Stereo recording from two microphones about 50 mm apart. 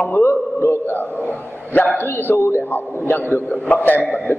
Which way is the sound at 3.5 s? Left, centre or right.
Left.